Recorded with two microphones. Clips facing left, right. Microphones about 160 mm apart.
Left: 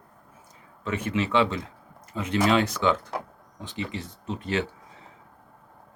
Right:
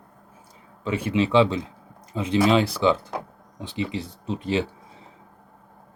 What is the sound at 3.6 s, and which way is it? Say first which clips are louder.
Speech: right 5 dB; 30° right (ahead or behind).